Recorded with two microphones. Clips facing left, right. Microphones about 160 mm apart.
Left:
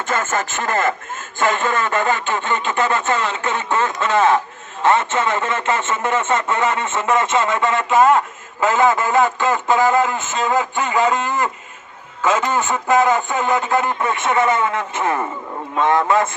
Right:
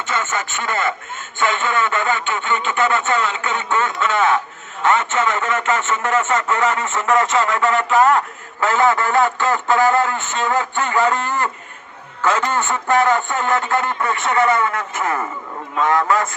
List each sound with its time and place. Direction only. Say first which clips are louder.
0.1 s speech: left 2 dB; 45° left (ahead or behind)
1.4 s a sound: left 1 dB; 40° left (ahead or behind)
4.8 s a man's voice: left 1 dB; 30° left (ahead or behind)